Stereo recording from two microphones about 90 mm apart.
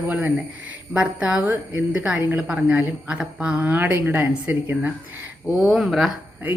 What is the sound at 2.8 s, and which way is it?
Speech, 20° right (ahead or behind).